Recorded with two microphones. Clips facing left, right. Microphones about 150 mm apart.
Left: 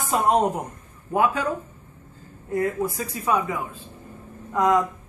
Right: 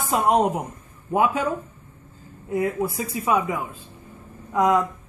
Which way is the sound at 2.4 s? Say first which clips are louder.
Even; 10° right (ahead or behind).